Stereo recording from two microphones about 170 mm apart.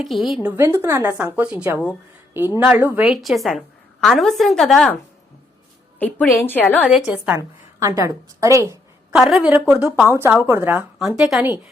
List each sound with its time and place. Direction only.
0.0 s a woman's voice: centre (ahead or behind)
0.4 s a woman's voice: 15° right (ahead or behind); by 4.9 s 5° left (ahead or behind)
6.0 s a woman's voice: 10° left (ahead or behind)
6.8 s a woman's voice: 5° right (ahead or behind)
7.3 s a woman's voice: 20° right (ahead or behind)
9.1 s a woman's voice: 5° right (ahead or behind)